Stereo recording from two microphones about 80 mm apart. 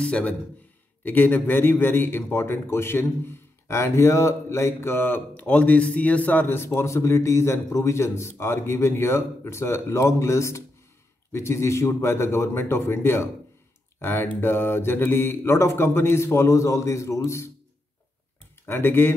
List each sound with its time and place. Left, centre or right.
0.0 s a man's voice: centre; by 17.5 s left
18.7 s speech: left